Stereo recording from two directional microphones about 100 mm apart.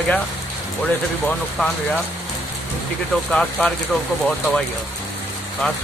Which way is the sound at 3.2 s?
10° left (ahead or behind).